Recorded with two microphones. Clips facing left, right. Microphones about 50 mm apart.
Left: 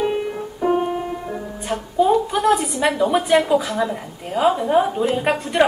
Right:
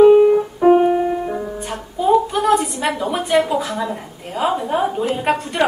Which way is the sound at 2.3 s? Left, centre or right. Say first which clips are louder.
Right 1 dB; centre.